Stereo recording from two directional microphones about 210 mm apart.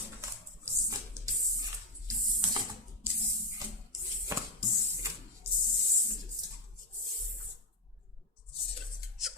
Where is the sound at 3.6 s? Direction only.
15° right (ahead or behind).